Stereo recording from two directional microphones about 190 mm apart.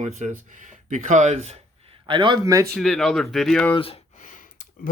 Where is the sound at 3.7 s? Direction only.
30° left (ahead or behind); by 4.9 s 45° left (ahead or behind).